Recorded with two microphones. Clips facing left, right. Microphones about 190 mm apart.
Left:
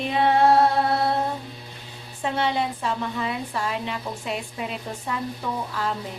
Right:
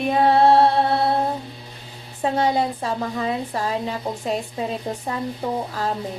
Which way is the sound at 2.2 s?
40° right (ahead or behind).